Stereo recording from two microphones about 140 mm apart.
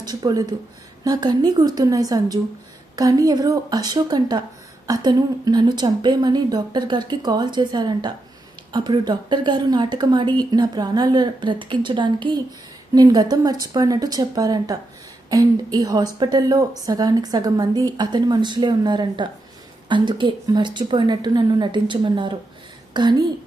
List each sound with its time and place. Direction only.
0.0 s a woman's voice: 30° right (ahead or behind)